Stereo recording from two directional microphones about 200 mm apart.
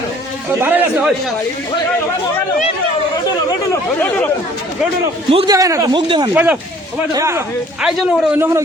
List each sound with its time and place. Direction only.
0.6 s a man's voice: 5° right (ahead or behind)
3.5 s speech: 10° left (ahead or behind)
5.3 s speech: 25° right (ahead or behind)
5.5 s speech: 15° right (ahead or behind)
6.3 s speech: 10° right (ahead or behind)
7.8 s a man's voice: 5° right (ahead or behind)